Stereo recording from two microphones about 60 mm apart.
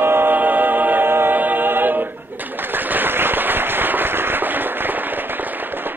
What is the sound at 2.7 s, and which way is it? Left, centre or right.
Firecracker, right.